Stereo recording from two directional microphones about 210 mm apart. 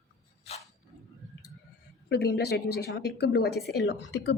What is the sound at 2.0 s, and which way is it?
A woman's voice, 50° left (ahead or behind).